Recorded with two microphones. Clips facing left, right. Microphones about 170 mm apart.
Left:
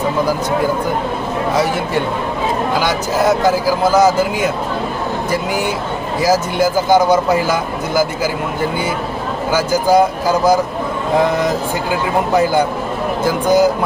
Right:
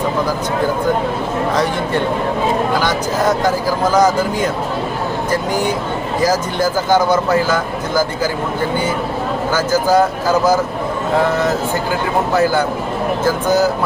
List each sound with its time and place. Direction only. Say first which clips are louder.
2.7 s speech: left 1 dB; 10° left (ahead or behind)
9.5 s speech: left 2 dB; 10° left (ahead or behind)